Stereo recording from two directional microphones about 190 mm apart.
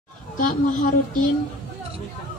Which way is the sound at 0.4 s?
45° left (ahead or behind).